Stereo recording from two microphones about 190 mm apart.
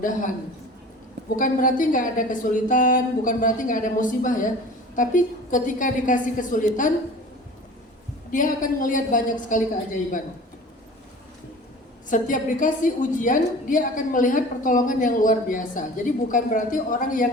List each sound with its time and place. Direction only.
1.4 s a woman's voice: 45° left (ahead or behind)
8.3 s a woman's voice: 45° left (ahead or behind)
12.0 s a woman's voice: 45° left (ahead or behind)